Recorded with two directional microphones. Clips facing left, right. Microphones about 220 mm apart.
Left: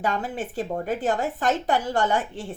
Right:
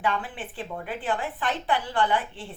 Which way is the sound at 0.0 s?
40° left (ahead or behind).